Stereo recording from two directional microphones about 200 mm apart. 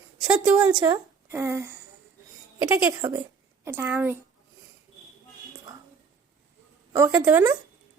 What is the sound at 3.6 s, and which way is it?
Speech, 10° right (ahead or behind).